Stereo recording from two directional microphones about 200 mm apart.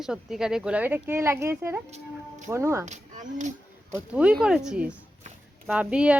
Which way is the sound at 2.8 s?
35° right (ahead or behind).